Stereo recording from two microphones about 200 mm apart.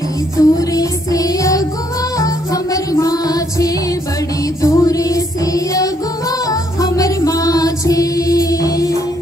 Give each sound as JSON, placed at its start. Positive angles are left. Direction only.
{"t": 0.4, "sound": "child singing", "side_deg": 15}
{"t": 2.1, "sound": "music", "side_deg": 15}